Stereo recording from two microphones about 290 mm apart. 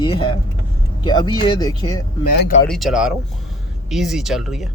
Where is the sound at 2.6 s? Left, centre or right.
Centre.